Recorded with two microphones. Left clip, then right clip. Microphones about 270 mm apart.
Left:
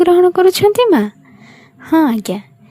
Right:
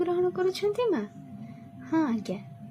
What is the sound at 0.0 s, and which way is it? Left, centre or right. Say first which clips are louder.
A woman's voice: left 17 dB; left.